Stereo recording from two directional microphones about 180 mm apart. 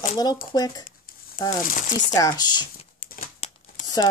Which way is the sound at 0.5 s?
20° left (ahead or behind).